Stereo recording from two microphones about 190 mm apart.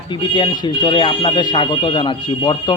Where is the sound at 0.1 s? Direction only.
25° left (ahead or behind).